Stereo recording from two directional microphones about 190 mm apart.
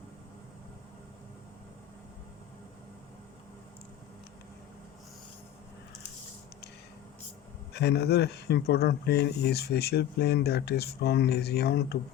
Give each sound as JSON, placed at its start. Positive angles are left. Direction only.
{"t": 7.7, "sound": "speech", "side_deg": 60}